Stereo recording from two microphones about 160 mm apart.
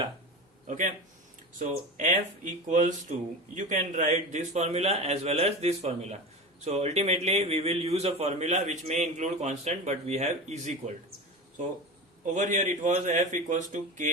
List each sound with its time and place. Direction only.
0.7 s speech: 50° right (ahead or behind)
12.2 s speech: 50° right (ahead or behind)